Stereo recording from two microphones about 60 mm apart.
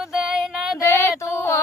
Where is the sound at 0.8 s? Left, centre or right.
Left.